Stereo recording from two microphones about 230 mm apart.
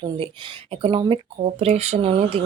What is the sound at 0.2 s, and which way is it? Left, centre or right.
A woman's voice, right.